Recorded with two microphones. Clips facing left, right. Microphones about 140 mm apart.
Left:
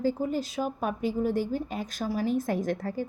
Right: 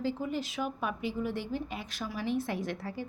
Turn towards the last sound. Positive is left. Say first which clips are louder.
# left 6 dB
turn(degrees=45)  # may be behind; listen again after turning